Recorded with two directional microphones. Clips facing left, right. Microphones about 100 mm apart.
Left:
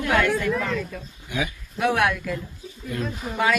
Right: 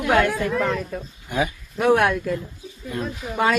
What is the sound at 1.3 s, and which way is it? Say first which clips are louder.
Speech: right 4 dB; 45° right (ahead or behind).